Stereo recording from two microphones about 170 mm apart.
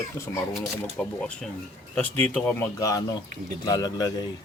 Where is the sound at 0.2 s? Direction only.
15° left (ahead or behind).